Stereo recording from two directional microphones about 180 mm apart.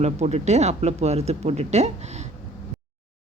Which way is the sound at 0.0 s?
35° right (ahead or behind).